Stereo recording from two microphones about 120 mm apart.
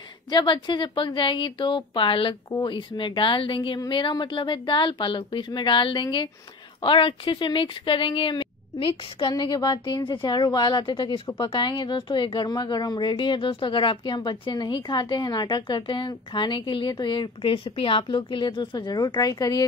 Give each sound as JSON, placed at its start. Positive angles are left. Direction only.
{"t": 0.3, "sound": "speech", "side_deg": 40}